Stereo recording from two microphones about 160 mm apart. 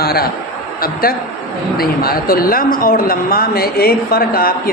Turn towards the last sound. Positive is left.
turn(degrees=65)  # may be behind; listen again after turning